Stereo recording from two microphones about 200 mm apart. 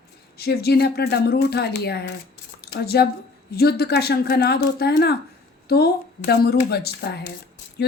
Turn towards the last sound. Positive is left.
turn(degrees=55)  # may be behind; listen again after turning